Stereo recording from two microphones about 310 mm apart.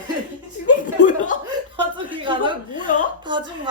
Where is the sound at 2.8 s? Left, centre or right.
Left.